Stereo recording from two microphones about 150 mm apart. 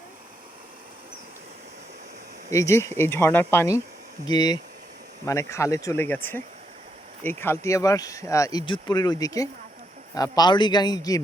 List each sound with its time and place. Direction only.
2.5 s speech: 20° left (ahead or behind)